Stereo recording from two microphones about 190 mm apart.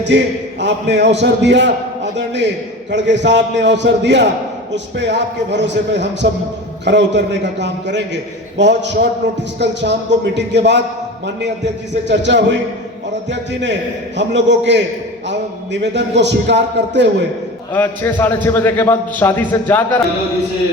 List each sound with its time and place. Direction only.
0.6 s a man's voice: 65° right (ahead or behind)
17.7 s a man's voice: 10° left (ahead or behind)